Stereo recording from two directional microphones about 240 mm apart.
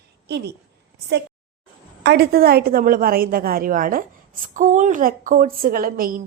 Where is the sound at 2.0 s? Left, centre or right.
Right.